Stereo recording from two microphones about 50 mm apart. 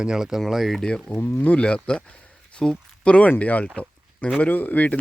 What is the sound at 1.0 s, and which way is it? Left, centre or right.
Speech, left.